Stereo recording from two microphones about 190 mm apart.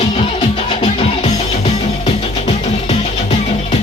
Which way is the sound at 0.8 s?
35° left (ahead or behind).